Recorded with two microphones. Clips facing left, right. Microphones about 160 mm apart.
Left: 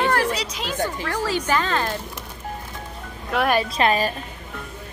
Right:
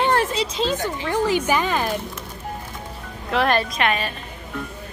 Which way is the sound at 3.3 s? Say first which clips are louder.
Right 1 dB; 5° left (ahead or behind).